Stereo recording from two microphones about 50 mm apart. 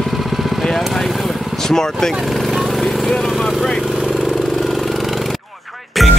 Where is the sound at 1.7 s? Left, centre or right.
Centre.